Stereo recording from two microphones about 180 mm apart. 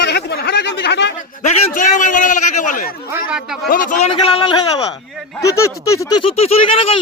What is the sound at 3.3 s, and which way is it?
Speech, 5° right (ahead or behind).